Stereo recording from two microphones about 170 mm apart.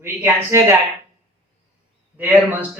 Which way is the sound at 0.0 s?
15° right (ahead or behind).